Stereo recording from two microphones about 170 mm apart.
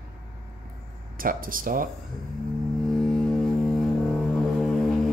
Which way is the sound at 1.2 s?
55° right (ahead or behind).